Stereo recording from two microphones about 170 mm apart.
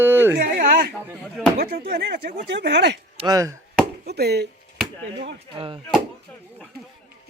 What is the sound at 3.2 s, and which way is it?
Chop, 20° right (ahead or behind).